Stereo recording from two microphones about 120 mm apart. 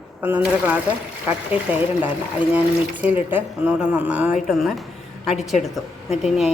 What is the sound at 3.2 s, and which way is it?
Speech, 15° right (ahead or behind).